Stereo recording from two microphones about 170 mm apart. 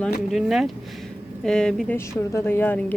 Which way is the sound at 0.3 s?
Centre (ahead or behind).